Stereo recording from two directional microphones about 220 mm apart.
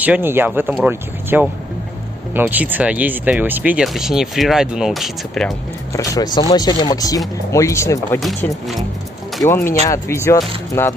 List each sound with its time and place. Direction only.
0.0 s speech: 10° right (ahead or behind)
5.9 s chopping: 20° left (ahead or behind)
9.4 s chopping: 10° left (ahead or behind)
10.7 s speech: 15° left (ahead or behind)